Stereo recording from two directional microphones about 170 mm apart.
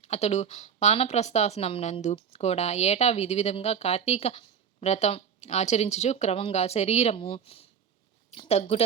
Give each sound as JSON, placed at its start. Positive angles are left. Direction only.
{"t": 0.0, "sound": "speech", "side_deg": 40}